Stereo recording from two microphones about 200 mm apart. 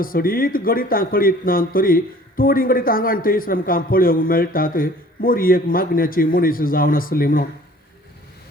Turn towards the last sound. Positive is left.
turn(degrees=45)  # may be behind; listen again after turning